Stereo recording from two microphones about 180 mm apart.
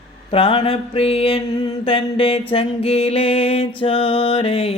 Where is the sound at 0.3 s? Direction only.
30° left (ahead or behind).